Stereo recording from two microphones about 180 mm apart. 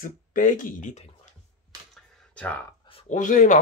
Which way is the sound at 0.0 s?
50° left (ahead or behind).